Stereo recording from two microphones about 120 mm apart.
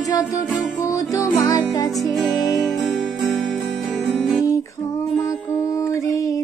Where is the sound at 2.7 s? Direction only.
Centre (ahead or behind).